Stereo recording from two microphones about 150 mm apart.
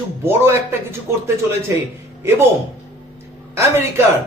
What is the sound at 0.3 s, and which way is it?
Speech, 15° right (ahead or behind).